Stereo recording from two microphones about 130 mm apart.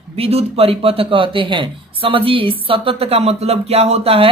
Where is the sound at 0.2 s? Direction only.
50° right (ahead or behind).